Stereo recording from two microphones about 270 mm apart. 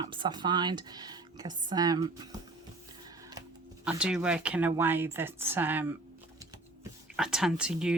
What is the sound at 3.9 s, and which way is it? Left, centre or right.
Speech, centre.